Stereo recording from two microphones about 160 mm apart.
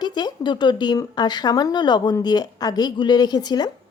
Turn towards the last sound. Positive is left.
turn(degrees=25)  # may be behind; listen again after turning